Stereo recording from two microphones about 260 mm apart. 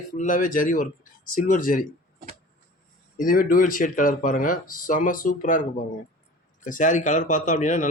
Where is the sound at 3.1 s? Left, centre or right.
Left.